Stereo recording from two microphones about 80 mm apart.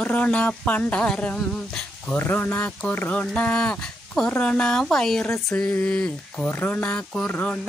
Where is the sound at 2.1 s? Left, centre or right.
Left; by 6.5 s centre.